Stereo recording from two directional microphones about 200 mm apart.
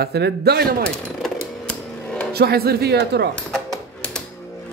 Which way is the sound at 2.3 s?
50° right (ahead or behind).